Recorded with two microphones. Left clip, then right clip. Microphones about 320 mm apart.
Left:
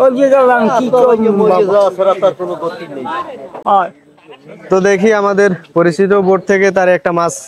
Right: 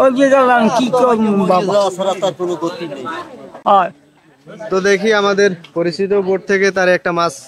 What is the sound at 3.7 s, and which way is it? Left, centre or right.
Speech, right.